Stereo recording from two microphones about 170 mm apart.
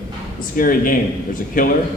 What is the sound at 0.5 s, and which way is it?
A man's voice, 55° left (ahead or behind).